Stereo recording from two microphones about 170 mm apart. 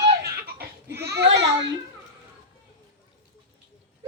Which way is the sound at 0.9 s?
75° right (ahead or behind).